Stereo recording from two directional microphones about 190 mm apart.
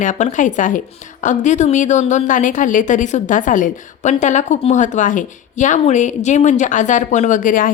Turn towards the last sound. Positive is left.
turn(degrees=45)  # may be behind; listen again after turning